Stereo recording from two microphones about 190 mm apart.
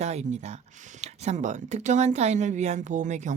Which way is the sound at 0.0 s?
35° right (ahead or behind).